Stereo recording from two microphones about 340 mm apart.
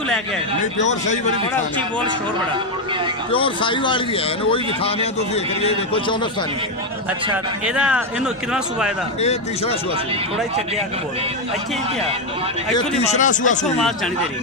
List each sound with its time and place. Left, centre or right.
0.7 s speech: left
3.3 s speech: centre
7.6 s speech: centre
9.2 s speech: centre
12.7 s speech: centre